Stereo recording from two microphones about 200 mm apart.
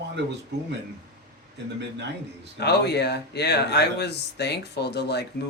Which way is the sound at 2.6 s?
55° left (ahead or behind).